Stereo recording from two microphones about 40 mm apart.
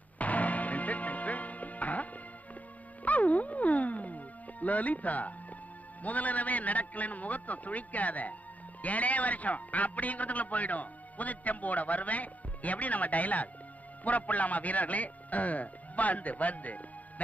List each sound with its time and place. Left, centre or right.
0.2 s music: left
3.1 s music: left
6.0 s a man's voice: left